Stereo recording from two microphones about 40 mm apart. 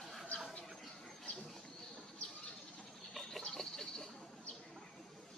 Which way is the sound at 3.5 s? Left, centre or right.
Centre.